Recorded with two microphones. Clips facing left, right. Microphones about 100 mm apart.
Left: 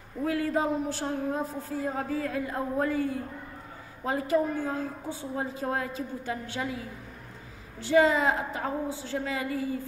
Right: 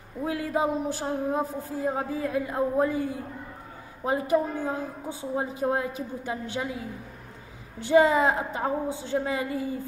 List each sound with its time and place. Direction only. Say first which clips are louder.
0.2 s a sound: even; 20° right (ahead or behind)
2.0 s a woman's voice: right 2 dB; 20° right (ahead or behind)
7.8 s a woman's voice: right 3 dB; 20° right (ahead or behind)